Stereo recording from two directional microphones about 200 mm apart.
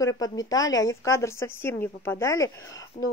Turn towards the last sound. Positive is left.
turn(degrees=30)  # may be behind; listen again after turning